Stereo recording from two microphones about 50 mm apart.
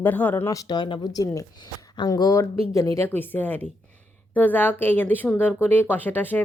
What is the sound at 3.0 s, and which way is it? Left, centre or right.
Speech, left.